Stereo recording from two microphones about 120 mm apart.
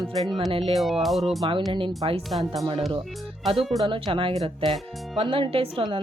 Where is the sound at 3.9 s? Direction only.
45° right (ahead or behind).